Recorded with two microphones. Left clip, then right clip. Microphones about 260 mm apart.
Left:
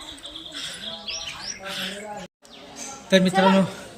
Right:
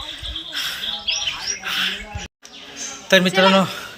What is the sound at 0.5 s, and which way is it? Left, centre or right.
Bird, centre.